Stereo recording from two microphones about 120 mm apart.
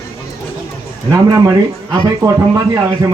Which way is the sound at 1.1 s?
30° right (ahead or behind).